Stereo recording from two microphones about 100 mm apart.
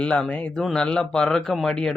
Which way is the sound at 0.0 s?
10° left (ahead or behind).